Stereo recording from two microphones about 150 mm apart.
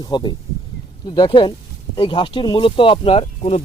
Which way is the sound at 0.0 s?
30° left (ahead or behind).